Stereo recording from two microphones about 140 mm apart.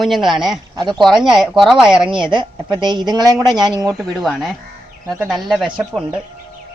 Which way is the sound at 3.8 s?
Centre (ahead or behind).